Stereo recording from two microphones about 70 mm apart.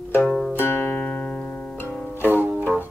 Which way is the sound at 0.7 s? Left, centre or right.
Left.